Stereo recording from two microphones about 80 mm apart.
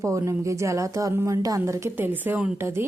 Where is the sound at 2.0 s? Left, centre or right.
Right.